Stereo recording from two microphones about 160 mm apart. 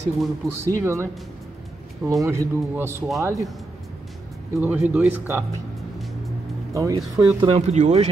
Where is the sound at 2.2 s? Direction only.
15° right (ahead or behind).